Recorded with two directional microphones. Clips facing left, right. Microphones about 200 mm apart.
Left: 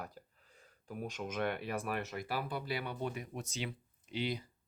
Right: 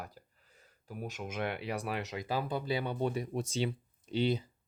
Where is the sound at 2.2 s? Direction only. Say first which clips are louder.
Right 4 dB; 20° right (ahead or behind).